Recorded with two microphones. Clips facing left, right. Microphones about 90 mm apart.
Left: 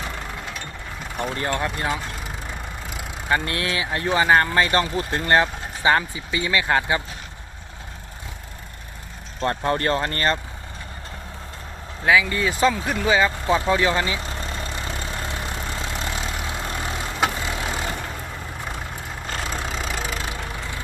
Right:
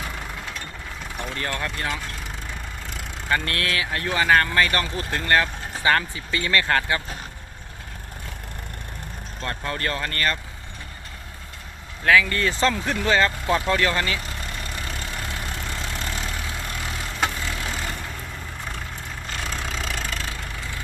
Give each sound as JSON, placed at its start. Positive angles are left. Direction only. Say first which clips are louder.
{"t": 1.3, "sound": "speech", "louder": "left 3 dB", "side_deg": 25}
{"t": 2.9, "sound": "vehicle", "louder": "left 2 dB", "side_deg": 5}
{"t": 3.3, "sound": "speech", "louder": "left 1 dB", "side_deg": 20}
{"t": 9.4, "sound": "speech", "louder": "left 6 dB", "side_deg": 30}
{"t": 12.0, "sound": "speech", "louder": "even", "side_deg": 15}
{"t": 13.7, "sound": "vehicle", "louder": "left 2 dB", "side_deg": 15}
{"t": 19.5, "sound": "vehicle", "louder": "even", "side_deg": 0}